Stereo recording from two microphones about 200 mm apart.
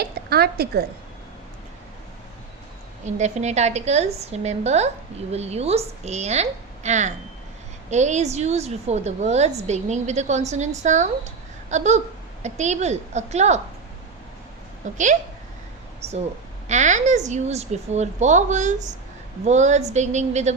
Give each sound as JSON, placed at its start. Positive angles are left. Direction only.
{"t": 0.0, "sound": "a woman's voice", "side_deg": -50}
{"t": 3.0, "sound": "a woman's voice", "side_deg": -35}
{"t": 14.8, "sound": "a woman's voice", "side_deg": -40}
{"t": 16.6, "sound": "a woman's voice", "side_deg": -35}